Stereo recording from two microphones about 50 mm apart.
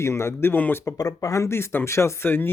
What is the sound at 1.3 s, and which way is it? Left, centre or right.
Speech, left.